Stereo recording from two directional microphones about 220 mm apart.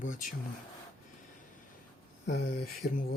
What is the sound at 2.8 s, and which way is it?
Speech, 45° left (ahead or behind).